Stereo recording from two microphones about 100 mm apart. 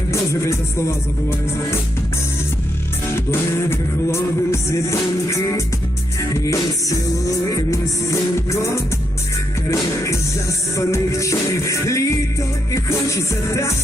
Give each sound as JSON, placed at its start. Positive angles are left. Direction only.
{"t": 0.1, "sound": "music", "side_deg": 30}
{"t": 3.2, "sound": "music", "side_deg": 25}